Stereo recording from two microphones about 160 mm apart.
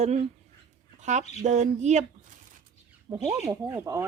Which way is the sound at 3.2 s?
15° right (ahead or behind).